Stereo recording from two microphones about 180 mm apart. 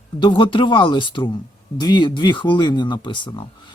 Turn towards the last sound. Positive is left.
turn(degrees=25)  # may be behind; listen again after turning